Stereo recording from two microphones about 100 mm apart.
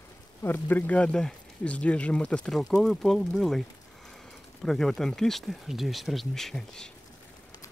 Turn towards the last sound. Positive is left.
turn(degrees=5)  # may be behind; listen again after turning